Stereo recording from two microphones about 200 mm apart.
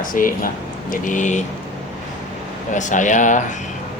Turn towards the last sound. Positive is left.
turn(degrees=40)  # may be behind; listen again after turning